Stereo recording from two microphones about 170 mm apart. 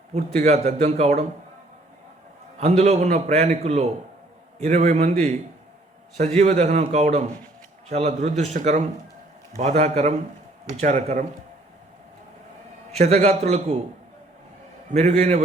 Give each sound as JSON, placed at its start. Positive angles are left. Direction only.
{"t": 0.1, "sound": "a man's voice", "side_deg": -40}
{"t": 2.6, "sound": "a man's voice", "side_deg": -40}
{"t": 13.0, "sound": "a man's voice", "side_deg": -40}
{"t": 14.9, "sound": "a man's voice", "side_deg": -40}